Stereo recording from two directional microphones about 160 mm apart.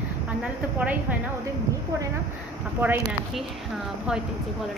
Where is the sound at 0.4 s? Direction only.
5° right (ahead or behind).